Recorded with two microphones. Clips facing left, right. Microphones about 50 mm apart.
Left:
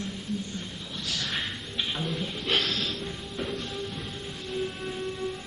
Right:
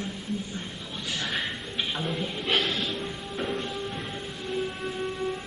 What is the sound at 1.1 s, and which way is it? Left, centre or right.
Speech, right.